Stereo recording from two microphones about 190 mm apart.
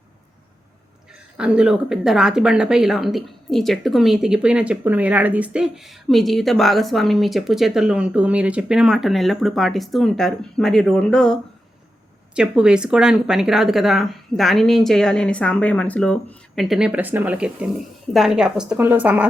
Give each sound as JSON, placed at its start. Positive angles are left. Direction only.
{"t": 1.4, "sound": "speech", "side_deg": -5}